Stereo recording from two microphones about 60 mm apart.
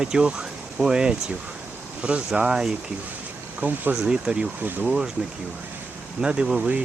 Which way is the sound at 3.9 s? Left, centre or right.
Centre.